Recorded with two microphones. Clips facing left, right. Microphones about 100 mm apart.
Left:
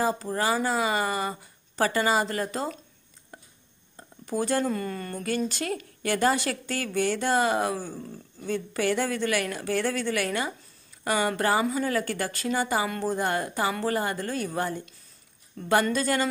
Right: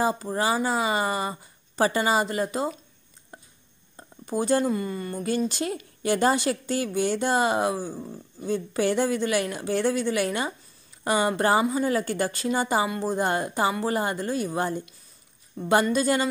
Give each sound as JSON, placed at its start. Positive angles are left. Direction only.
{"t": 0.0, "sound": "a woman's voice", "side_deg": -15}
{"t": 3.3, "sound": "a sound", "side_deg": -25}
{"t": 3.9, "sound": "speech", "side_deg": -20}
{"t": 5.5, "sound": "a woman's voice", "side_deg": -20}